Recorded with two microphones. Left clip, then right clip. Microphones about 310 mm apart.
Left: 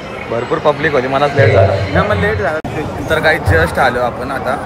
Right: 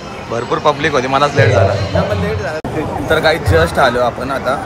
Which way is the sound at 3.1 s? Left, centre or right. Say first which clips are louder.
Even; centre.